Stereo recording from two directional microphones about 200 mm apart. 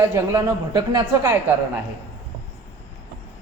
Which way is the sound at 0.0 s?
15° right (ahead or behind).